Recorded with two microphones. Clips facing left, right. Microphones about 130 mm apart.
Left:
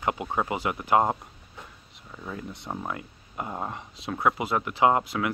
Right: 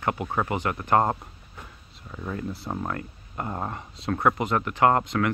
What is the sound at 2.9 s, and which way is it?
Speech, 10° left (ahead or behind).